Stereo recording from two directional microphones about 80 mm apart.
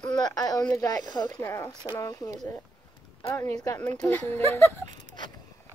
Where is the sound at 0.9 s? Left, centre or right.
Left.